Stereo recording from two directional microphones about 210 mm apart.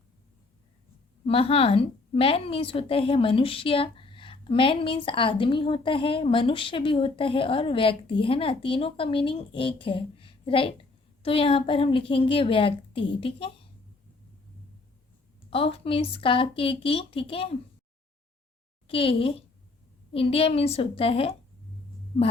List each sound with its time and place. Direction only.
1.3 s a woman's voice: 25° left (ahead or behind)
15.4 s a woman's voice: 25° left (ahead or behind)
18.9 s a woman's voice: 25° left (ahead or behind)